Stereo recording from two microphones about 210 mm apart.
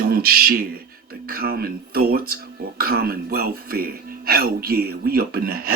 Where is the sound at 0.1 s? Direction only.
45° right (ahead or behind).